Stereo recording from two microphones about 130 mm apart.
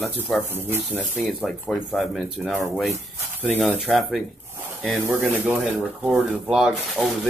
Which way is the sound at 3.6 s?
Centre (ahead or behind).